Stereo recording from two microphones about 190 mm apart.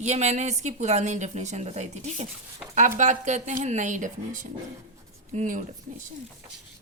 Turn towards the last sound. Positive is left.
turn(degrees=-40)  # may be behind; listen again after turning